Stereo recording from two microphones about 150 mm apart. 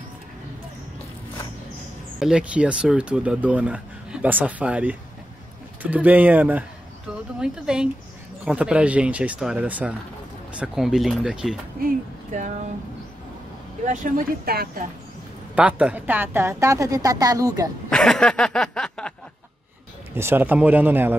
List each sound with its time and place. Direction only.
2.1 s speech: 5° right (ahead or behind)
13.8 s speech: 80° right
15.5 s a woman's voice: 10° right (ahead or behind)
17.8 s a sound: 5° left (ahead or behind)
20.2 s speech: 15° right (ahead or behind)